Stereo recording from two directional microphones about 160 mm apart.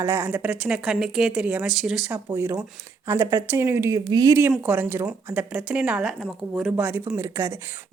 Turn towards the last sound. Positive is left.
turn(degrees=-20)  # may be behind; listen again after turning